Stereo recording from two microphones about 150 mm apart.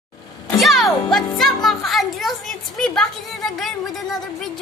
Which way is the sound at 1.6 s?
Centre (ahead or behind).